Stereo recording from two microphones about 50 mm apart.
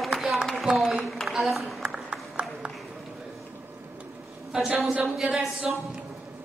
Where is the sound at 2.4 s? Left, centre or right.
Right.